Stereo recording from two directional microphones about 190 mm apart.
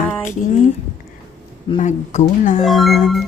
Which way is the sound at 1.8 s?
40° left (ahead or behind).